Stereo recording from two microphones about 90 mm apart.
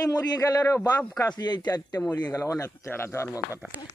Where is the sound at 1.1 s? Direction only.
50° left (ahead or behind).